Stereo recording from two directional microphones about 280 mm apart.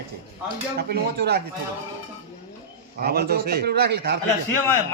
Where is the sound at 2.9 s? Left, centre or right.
Right.